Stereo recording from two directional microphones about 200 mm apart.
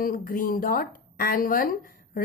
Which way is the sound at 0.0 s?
45° left (ahead or behind).